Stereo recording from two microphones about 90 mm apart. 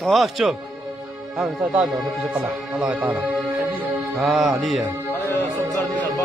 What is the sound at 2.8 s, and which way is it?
Speech, 15° right (ahead or behind).